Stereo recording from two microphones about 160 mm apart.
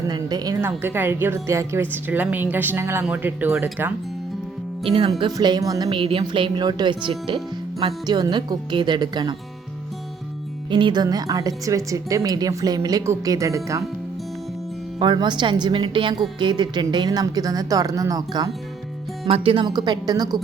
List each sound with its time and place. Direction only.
0.1 s a woman's voice: 25° right (ahead or behind)
4.9 s speech: 35° right (ahead or behind)
5.9 s speech: 35° right (ahead or behind)
10.7 s speech: 30° right (ahead or behind)
14.9 s speech: 30° right (ahead or behind)
19.3 s speech: 35° right (ahead or behind)
19.6 s speech: 25° right (ahead or behind)